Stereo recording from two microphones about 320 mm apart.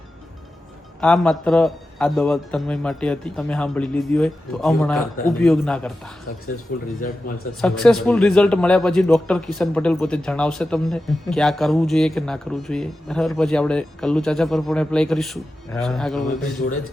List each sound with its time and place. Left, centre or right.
1.0 s a man's voice: centre
6.7 s speech: left
7.6 s a man's voice: centre